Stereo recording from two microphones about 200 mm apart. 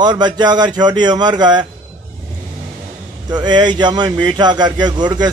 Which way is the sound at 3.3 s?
20° right (ahead or behind).